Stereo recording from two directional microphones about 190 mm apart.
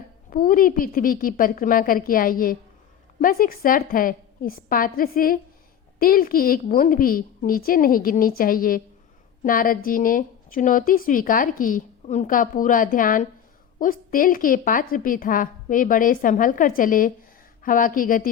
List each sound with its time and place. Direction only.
0.3 s a woman's voice: 50° left (ahead or behind)